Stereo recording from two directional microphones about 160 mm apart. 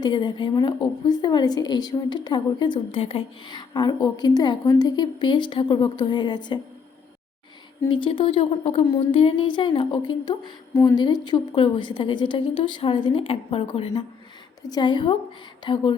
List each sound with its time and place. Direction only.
0.0 s a woman's voice: 30° left (ahead or behind)
7.9 s a woman's voice: 30° left (ahead or behind)